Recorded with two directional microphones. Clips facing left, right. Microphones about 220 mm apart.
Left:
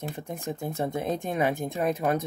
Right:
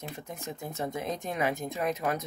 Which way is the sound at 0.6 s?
30° left (ahead or behind).